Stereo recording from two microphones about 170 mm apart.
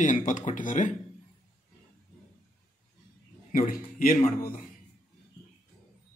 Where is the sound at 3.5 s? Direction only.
55° left (ahead or behind).